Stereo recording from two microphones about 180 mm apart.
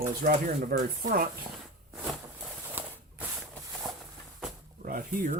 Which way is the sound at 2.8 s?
10° right (ahead or behind).